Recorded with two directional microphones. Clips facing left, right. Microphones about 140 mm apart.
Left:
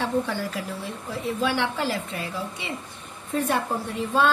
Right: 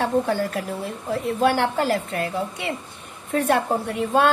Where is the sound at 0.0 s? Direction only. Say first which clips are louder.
Right 4 dB; 50° right (ahead or behind).